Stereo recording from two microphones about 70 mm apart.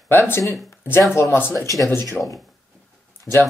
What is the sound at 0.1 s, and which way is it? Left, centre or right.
Speech, left.